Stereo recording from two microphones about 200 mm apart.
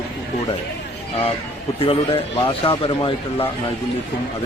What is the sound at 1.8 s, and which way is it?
Speech, 30° left (ahead or behind).